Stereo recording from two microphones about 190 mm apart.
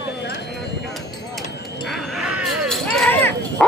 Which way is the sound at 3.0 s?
10° left (ahead or behind).